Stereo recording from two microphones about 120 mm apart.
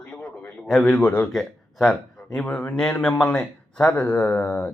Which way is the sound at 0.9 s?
15° left (ahead or behind).